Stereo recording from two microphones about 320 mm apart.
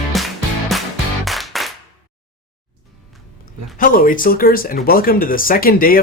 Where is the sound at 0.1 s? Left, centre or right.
Centre.